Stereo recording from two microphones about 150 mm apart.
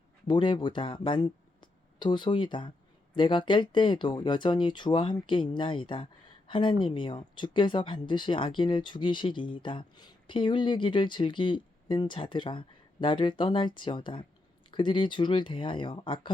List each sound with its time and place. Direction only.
0.3 s speech: 30° left (ahead or behind)